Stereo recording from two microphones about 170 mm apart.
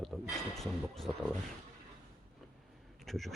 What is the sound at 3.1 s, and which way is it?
Speech, centre (ahead or behind).